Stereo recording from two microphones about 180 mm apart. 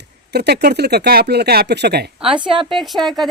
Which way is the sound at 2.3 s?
25° right (ahead or behind).